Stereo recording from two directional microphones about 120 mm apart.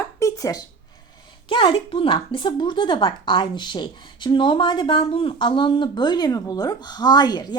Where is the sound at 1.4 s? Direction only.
45° left (ahead or behind).